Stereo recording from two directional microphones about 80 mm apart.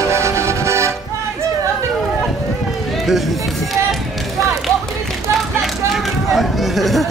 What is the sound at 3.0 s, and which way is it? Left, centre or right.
Run, centre.